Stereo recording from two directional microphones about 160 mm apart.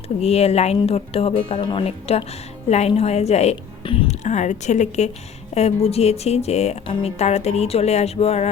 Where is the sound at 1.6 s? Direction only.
35° left (ahead or behind).